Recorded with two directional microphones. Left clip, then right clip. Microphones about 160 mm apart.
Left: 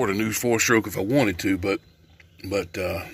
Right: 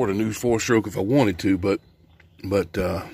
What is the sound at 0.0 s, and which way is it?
Speech, 25° right (ahead or behind).